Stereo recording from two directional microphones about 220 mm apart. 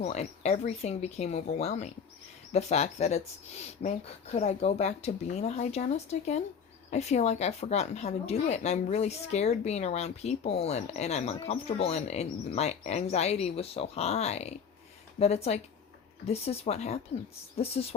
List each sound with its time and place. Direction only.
0.0 s speech: 30° left (ahead or behind)